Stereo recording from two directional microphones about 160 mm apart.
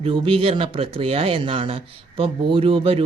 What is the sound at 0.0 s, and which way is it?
Speech, 35° right (ahead or behind).